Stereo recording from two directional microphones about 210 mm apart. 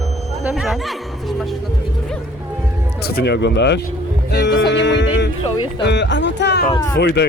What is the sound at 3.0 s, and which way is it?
Speech, 50° left (ahead or behind).